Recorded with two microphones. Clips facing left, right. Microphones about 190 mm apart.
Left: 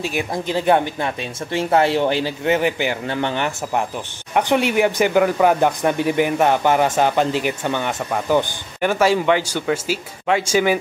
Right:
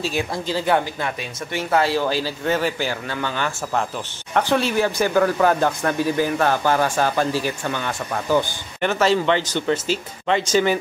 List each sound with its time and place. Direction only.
0.0 s speech: 20° left (ahead or behind)